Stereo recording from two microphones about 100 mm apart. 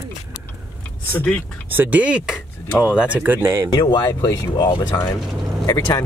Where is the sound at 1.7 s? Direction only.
15° right (ahead or behind).